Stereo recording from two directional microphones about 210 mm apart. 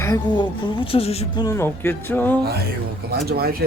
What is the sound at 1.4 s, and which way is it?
Speech, 10° left (ahead or behind).